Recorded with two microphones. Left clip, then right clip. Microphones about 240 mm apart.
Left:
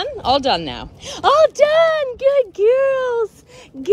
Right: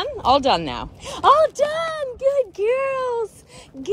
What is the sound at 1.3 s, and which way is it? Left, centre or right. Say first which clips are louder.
Speech: left 6 dB; left.